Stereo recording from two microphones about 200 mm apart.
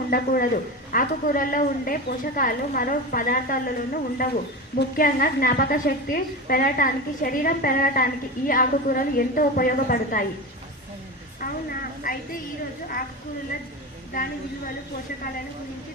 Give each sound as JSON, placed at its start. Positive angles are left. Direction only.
{"t": 0.1, "sound": "a woman's voice", "side_deg": 45}
{"t": 11.3, "sound": "a woman's voice", "side_deg": 45}